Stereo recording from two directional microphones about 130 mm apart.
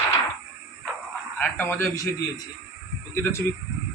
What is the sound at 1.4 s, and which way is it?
Speech, 15° left (ahead or behind).